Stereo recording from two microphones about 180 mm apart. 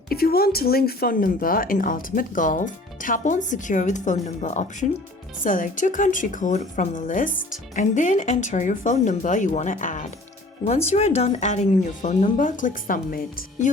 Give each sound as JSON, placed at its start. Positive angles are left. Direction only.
{"t": 0.1, "sound": "speech", "side_deg": 55}